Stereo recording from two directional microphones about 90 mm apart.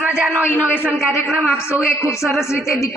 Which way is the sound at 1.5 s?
30° left (ahead or behind).